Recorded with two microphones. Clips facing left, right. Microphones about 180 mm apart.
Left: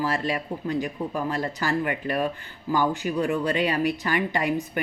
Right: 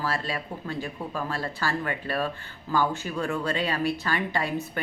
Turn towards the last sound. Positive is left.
turn(degrees=15)  # may be behind; listen again after turning